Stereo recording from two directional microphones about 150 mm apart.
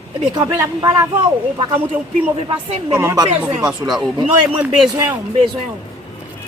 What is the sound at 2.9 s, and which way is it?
Speech, 20° right (ahead or behind).